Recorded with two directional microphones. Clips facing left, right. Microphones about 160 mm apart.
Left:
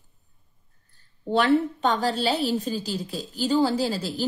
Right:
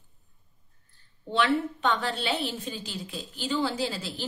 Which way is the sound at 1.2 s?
40° left (ahead or behind).